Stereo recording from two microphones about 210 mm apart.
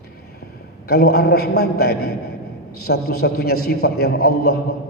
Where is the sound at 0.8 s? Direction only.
50° left (ahead or behind).